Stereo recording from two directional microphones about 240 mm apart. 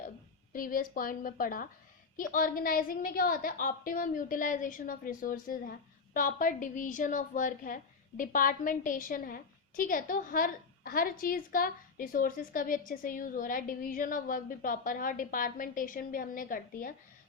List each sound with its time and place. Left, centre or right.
0.5 s a woman's voice: left